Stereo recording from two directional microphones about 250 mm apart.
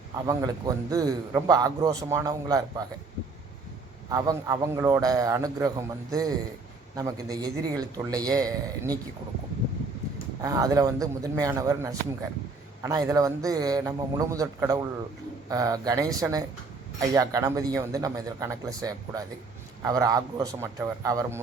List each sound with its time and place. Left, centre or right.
0.3 s a man's voice: centre
4.1 s a man's voice: centre
10.4 s a man's voice: centre